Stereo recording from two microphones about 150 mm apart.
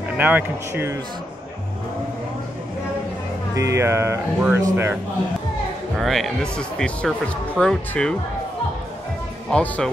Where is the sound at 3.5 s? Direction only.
20° right (ahead or behind).